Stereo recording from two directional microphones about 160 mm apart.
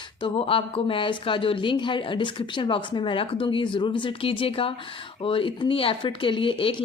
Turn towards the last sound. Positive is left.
turn(degrees=30)  # may be behind; listen again after turning